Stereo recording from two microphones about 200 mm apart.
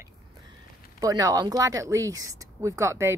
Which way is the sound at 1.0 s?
15° right (ahead or behind).